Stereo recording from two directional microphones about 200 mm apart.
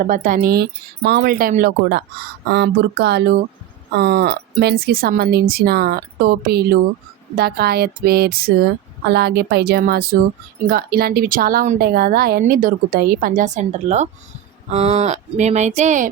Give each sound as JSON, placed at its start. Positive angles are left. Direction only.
{"t": 0.0, "sound": "a woman's voice", "side_deg": -45}